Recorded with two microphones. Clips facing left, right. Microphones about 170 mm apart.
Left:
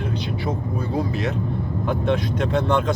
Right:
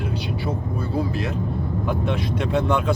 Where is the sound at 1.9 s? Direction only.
5° right (ahead or behind).